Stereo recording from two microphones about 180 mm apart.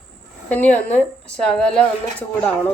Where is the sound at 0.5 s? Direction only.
10° left (ahead or behind).